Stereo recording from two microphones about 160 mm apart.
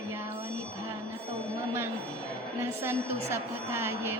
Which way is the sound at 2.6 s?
15° right (ahead or behind).